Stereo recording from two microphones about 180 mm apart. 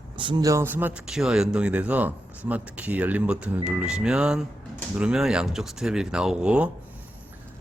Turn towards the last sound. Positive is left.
turn(degrees=-5)  # may be behind; listen again after turning